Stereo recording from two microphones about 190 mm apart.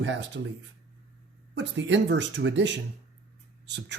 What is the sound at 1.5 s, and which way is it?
Speech, 70° right (ahead or behind).